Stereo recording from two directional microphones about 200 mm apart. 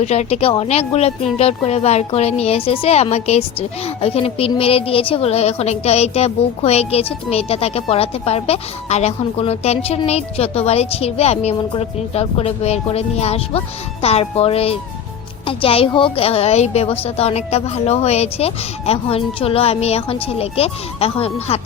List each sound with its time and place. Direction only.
0.0 s a woman's voice: 35° left (ahead or behind)